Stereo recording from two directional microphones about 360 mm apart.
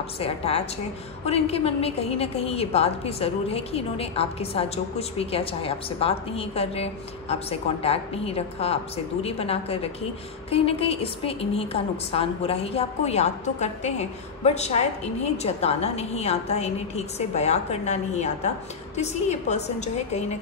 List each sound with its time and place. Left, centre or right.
0.2 s a woman's voice: centre